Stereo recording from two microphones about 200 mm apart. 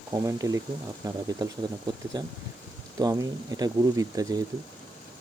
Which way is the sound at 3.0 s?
20° right (ahead or behind).